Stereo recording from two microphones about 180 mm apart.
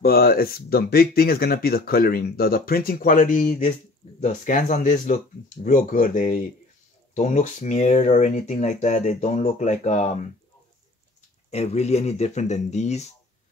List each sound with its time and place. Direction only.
0.0 s speech: 55° left (ahead or behind); by 10.3 s 40° left (ahead or behind)
11.5 s speech: 35° left (ahead or behind)